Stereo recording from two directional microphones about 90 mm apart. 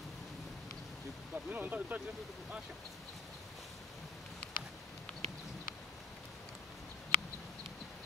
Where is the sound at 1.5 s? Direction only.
20° right (ahead or behind).